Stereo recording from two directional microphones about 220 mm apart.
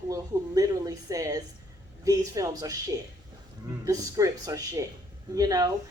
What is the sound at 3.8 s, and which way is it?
A woman's voice, 15° right (ahead or behind).